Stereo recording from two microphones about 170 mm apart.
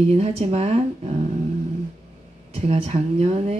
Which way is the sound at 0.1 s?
40° right (ahead or behind).